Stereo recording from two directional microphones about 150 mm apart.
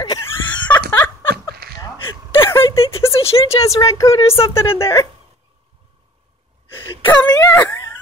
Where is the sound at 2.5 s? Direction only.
20° left (ahead or behind).